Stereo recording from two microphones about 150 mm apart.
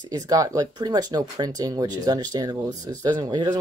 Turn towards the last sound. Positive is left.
turn(degrees=-25)  # may be behind; listen again after turning